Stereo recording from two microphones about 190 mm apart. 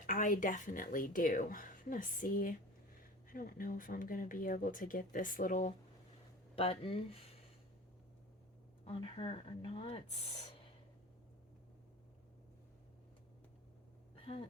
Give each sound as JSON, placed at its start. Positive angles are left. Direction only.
{"t": 0.0, "sound": "a woman's voice", "side_deg": 45}
{"t": 6.6, "sound": "speech", "side_deg": 30}
{"t": 8.8, "sound": "speech", "side_deg": 30}